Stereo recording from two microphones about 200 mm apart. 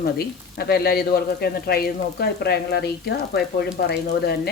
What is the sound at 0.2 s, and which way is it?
Speech, 50° left (ahead or behind).